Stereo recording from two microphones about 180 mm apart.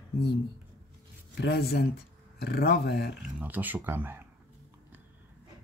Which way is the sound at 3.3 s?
10° right (ahead or behind).